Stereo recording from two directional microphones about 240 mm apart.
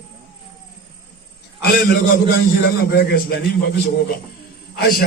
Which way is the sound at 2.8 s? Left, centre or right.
Left.